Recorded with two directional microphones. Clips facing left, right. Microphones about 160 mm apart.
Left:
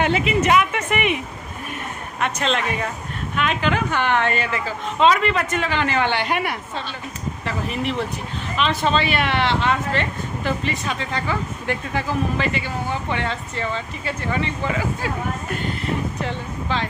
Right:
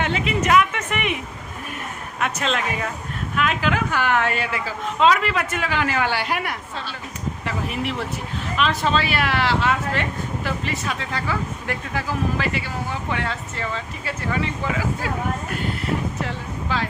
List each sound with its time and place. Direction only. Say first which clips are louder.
0.0 s speech: left 3 dB; 5° left (ahead or behind)
2.2 s speech: left 1 dB; 5° right (ahead or behind)
16.2 s speech: left 2 dB; 5° right (ahead or behind)